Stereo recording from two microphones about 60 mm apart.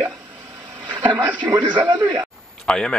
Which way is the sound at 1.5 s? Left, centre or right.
Right.